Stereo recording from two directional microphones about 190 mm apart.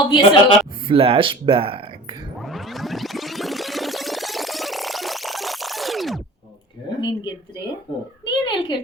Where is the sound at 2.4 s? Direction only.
Centre (ahead or behind).